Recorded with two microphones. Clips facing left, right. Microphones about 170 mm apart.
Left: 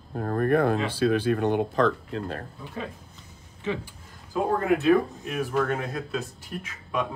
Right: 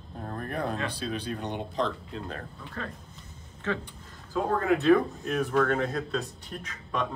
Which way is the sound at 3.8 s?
5° left (ahead or behind).